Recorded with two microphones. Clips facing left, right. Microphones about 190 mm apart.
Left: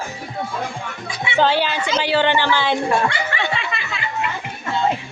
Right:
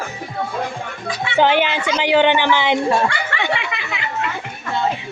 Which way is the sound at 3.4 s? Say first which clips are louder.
Right 2 dB; 15° right (ahead or behind).